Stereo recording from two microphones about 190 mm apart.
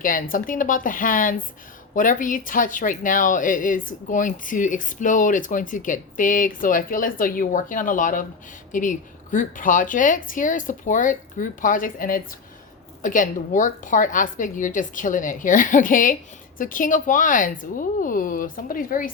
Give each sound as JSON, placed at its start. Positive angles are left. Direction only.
{"t": 0.0, "sound": "speech", "side_deg": 45}